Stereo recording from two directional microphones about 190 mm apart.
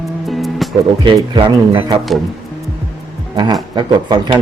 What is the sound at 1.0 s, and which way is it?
Speech, 25° right (ahead or behind).